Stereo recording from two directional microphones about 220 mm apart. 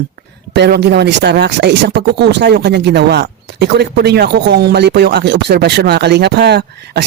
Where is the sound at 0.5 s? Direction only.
50° right (ahead or behind).